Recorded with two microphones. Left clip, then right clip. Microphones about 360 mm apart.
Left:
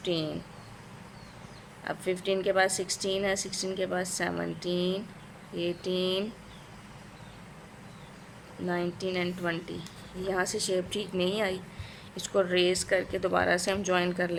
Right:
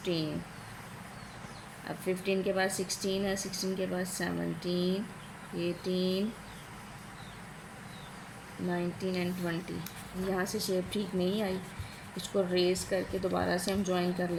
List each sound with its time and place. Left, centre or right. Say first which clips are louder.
0.0 s speech: left 3 dB; left
2.0 s speech: left 3 dB; left
8.7 s speech: left 4 dB; left
12.5 s speech: left 4 dB; left